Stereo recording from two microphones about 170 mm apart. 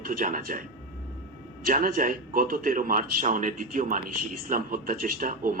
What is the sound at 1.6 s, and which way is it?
A man's voice, 55° right (ahead or behind).